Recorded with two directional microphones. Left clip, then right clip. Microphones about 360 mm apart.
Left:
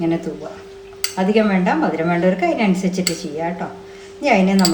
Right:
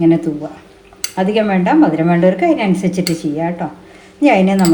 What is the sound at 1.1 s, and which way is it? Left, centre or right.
Speech, centre.